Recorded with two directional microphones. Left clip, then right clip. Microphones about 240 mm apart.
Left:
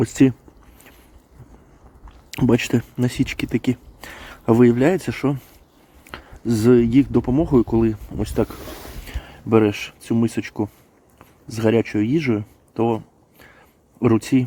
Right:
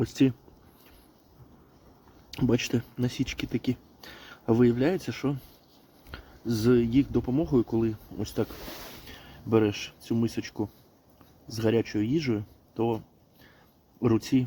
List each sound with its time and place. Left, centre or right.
0.0 s speech: left
2.3 s speech: left
14.0 s speech: left